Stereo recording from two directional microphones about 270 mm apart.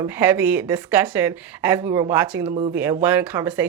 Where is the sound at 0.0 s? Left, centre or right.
Centre.